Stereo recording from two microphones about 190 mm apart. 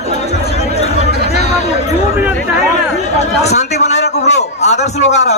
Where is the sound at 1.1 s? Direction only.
60° right (ahead or behind).